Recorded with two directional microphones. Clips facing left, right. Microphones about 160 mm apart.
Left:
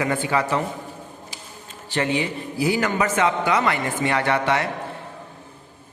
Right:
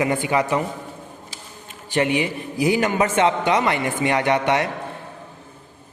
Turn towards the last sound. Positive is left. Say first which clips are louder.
# right 2 dB
turn(degrees=-20)  # may be behind; listen again after turning